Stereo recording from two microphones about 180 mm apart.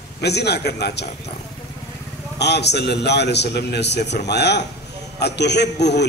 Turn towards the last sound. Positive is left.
turn(degrees=70)  # may be behind; listen again after turning